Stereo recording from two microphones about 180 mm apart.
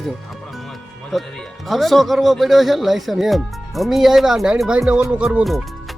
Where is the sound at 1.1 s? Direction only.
Centre (ahead or behind).